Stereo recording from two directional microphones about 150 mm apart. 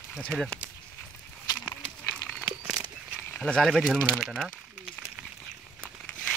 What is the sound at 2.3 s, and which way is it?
Crumpling, 5° left (ahead or behind).